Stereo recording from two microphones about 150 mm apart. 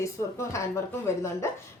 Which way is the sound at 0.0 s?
20° left (ahead or behind).